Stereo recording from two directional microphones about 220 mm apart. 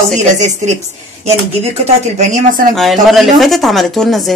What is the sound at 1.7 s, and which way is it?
Speech, 30° right (ahead or behind).